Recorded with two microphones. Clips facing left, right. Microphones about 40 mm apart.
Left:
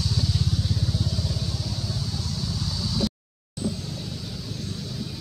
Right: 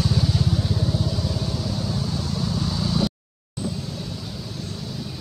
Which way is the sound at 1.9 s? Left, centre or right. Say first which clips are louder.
Right 5 dB; right.